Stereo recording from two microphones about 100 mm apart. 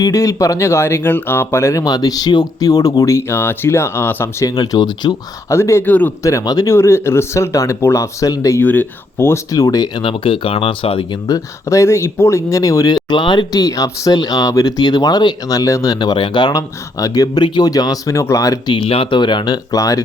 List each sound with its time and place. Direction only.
0.0 s speech: 35° left (ahead or behind)
4.4 s speech: 40° left (ahead or behind)
5.5 s speech: 30° left (ahead or behind)
6.7 s speech: 25° left (ahead or behind)
8.6 s speech: 20° left (ahead or behind); by 9.9 s 40° left (ahead or behind)
10.0 s speech: 60° left (ahead or behind)
11.3 s speech: 30° left (ahead or behind)
18.7 s speech: 65° left (ahead or behind)
19.7 s speech: 35° left (ahead or behind)